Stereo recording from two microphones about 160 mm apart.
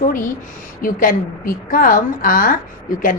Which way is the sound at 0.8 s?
60° left (ahead or behind).